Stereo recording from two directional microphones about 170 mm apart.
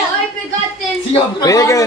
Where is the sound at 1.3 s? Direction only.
20° left (ahead or behind).